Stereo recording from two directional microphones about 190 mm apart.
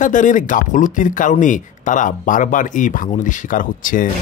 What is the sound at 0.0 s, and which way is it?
Speech, 40° left (ahead or behind).